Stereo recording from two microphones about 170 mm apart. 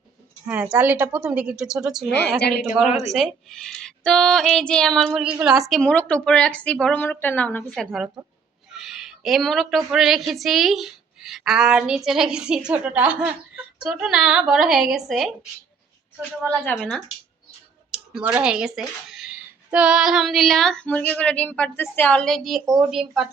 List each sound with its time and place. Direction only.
0.4 s a woman's voice: 10° right (ahead or behind)
2.1 s a woman's voice: 70° left (ahead or behind)
3.1 s a woman's voice: centre (ahead or behind)
16.7 s speech: centre (ahead or behind)